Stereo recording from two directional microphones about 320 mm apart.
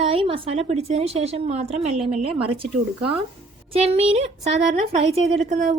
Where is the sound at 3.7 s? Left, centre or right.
Centre.